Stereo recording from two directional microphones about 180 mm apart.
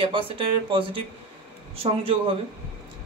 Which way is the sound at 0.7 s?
30° right (ahead or behind).